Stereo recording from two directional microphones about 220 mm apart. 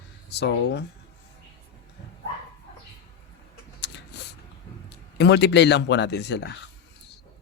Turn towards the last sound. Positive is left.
turn(degrees=50)  # may be behind; listen again after turning